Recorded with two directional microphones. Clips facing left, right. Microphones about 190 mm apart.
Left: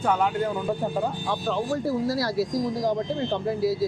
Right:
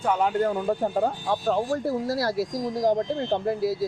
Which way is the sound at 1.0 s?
45° right (ahead or behind).